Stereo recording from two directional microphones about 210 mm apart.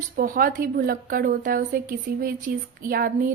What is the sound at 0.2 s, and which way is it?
A woman's voice, 40° right (ahead or behind).